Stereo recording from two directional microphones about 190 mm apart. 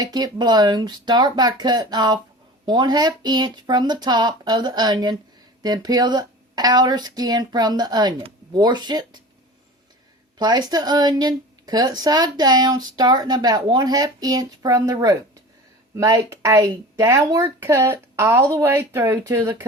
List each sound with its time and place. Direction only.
0.0 s speech: 20° right (ahead or behind)
10.3 s speech: 20° right (ahead or behind)